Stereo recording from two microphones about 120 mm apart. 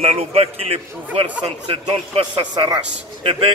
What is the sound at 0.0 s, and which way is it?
A man's voice, 60° right (ahead or behind).